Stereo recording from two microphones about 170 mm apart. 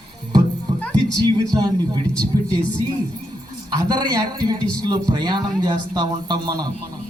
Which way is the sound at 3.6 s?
25° right (ahead or behind).